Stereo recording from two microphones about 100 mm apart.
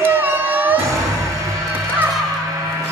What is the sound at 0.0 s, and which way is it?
Music, 20° right (ahead or behind).